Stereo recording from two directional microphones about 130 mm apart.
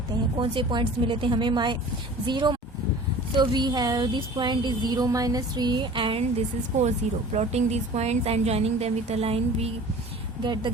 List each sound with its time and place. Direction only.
0.3 s speech: 40° right (ahead or behind)
7.3 s a woman's voice: 55° right (ahead or behind)
10.4 s speech: 35° right (ahead or behind)